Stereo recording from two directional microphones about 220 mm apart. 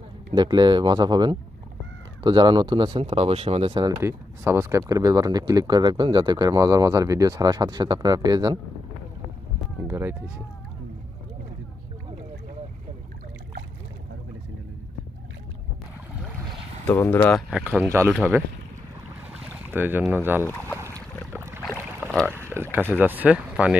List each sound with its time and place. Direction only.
0.3 s speech: 20° right (ahead or behind)
9.8 s speech: 10° right (ahead or behind)
16.4 s boat: 10° left (ahead or behind)
17.5 s speech: 5° right (ahead or behind)
20.4 s speech: 10° left (ahead or behind)
22.0 s boat: 5° left (ahead or behind)
22.5 s speech: 10° right (ahead or behind)